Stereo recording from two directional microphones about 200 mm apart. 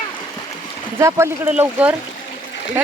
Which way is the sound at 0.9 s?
15° right (ahead or behind).